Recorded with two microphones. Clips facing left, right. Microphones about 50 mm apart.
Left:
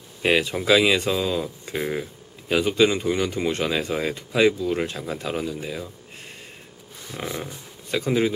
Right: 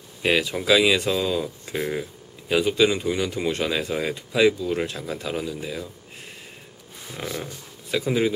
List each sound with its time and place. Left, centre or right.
0.2 s speech: centre
7.2 s a sound: centre
7.9 s speech: centre